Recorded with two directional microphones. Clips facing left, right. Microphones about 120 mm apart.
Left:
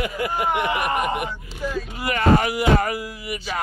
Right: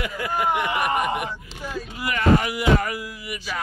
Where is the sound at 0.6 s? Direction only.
15° left (ahead or behind).